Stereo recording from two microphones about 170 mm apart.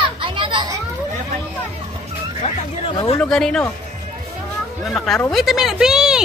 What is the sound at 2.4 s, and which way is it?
Speech, 35° left (ahead or behind).